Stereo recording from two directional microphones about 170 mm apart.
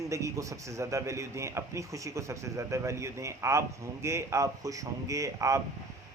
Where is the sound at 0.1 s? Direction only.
20° right (ahead or behind).